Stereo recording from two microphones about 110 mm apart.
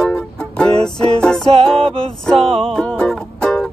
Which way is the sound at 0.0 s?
5° left (ahead or behind).